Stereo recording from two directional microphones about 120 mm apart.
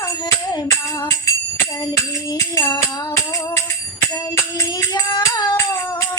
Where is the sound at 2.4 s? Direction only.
25° left (ahead or behind).